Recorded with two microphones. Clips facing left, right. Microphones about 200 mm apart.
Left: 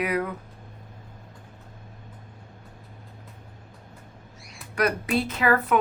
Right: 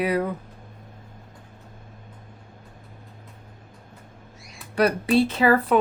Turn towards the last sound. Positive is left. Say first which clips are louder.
# right 4 dB
turn(degrees=-30)  # may be behind; listen again after turning